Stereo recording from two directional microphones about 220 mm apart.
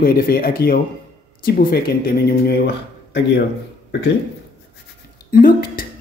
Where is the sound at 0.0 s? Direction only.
45° left (ahead or behind).